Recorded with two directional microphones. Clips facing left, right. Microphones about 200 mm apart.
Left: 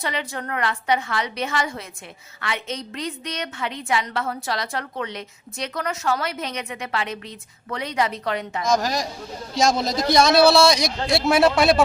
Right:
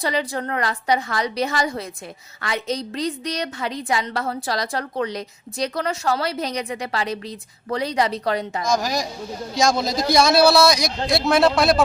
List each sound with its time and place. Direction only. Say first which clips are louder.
0.0 s a woman's voice: right 5 dB; 35° right (ahead or behind)
8.7 s a man's voice: left 1 dB; centre (ahead or behind)